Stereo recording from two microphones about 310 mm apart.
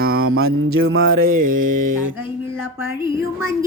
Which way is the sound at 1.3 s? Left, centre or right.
Right.